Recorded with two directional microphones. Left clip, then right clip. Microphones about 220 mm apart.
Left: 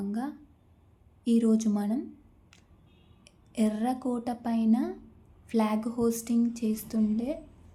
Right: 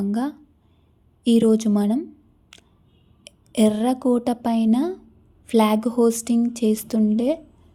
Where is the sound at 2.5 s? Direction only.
40° right (ahead or behind).